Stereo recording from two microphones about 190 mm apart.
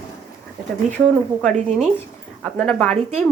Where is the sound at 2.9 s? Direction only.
35° right (ahead or behind).